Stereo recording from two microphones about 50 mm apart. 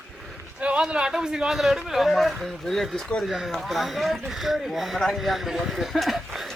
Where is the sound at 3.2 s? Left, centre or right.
Centre.